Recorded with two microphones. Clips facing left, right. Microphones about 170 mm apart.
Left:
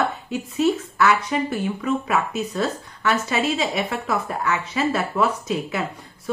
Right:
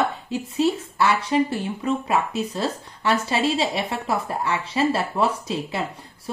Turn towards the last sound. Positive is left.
turn(degrees=-30)  # may be behind; listen again after turning